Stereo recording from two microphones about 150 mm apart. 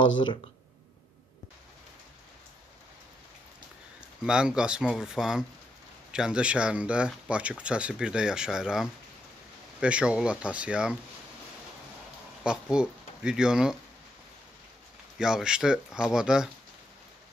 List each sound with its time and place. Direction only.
0.0 s speech: 30° left (ahead or behind)
4.2 s speech: 5° right (ahead or behind)
12.4 s speech: 5° right (ahead or behind)
15.1 s speech: 5° right (ahead or behind)